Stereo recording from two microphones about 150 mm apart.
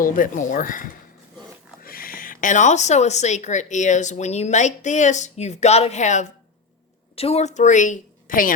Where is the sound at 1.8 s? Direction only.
75° left (ahead or behind); by 6.3 s 55° left (ahead or behind).